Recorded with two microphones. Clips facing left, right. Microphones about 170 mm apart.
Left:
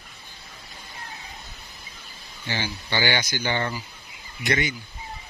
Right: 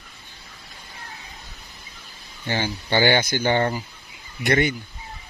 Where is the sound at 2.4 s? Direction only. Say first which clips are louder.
Right 5 dB; 50° right (ahead or behind).